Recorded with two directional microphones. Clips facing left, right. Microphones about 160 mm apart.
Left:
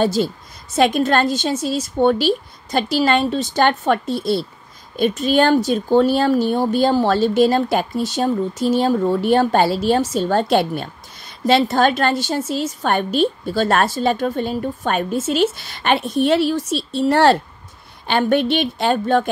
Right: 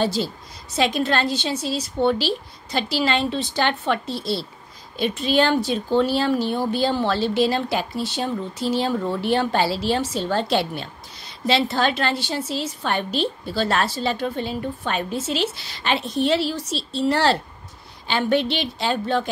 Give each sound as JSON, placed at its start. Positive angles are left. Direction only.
{"t": 0.0, "sound": "speech", "side_deg": 50}